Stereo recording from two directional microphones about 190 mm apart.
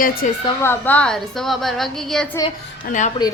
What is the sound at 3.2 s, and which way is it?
Speech, 20° left (ahead or behind).